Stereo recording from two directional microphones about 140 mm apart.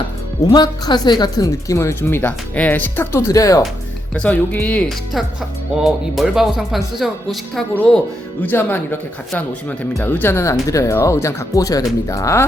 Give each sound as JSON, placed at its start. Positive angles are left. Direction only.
{"t": 0.5, "sound": "speech", "side_deg": 30}
{"t": 4.1, "sound": "speech", "side_deg": 10}
{"t": 5.7, "sound": "speech", "side_deg": 0}
{"t": 8.4, "sound": "speech", "side_deg": 15}
{"t": 9.3, "sound": "speech", "side_deg": 0}
{"t": 10.0, "sound": "speech", "side_deg": 15}